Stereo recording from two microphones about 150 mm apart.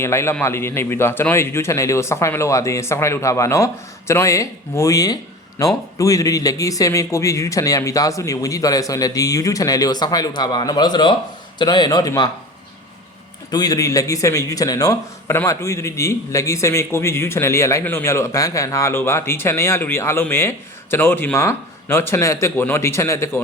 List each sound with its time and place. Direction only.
0.0 s a man's voice: 15° left (ahead or behind)
13.5 s a man's voice: 25° left (ahead or behind)